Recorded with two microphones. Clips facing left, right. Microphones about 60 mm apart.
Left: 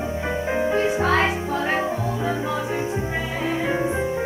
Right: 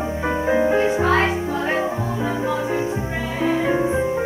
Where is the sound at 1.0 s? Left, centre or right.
Centre.